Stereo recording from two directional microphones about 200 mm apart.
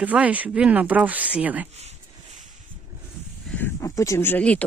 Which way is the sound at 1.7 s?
30° right (ahead or behind).